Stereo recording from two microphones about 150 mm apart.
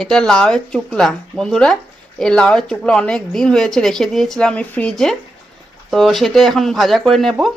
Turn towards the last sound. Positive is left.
turn(degrees=0)  # may be behind; listen again after turning